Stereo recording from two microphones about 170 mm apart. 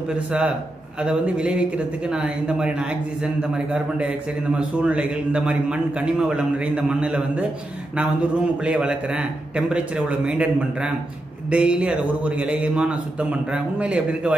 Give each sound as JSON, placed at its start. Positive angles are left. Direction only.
{"t": 0.1, "sound": "a man's voice", "side_deg": -5}